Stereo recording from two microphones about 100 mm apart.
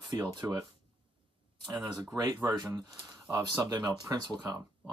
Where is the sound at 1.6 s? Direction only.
45° right (ahead or behind).